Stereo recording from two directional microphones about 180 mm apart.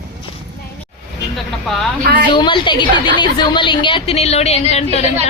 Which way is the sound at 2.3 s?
25° left (ahead or behind).